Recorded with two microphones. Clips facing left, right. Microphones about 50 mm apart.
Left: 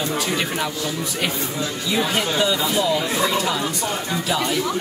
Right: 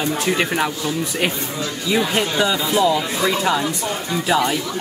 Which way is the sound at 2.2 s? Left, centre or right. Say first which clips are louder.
Right 2 dB; centre.